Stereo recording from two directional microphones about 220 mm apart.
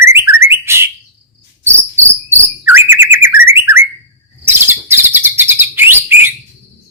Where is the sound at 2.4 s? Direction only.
10° right (ahead or behind).